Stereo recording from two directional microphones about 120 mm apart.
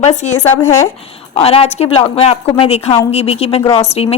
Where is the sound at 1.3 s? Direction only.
55° left (ahead or behind).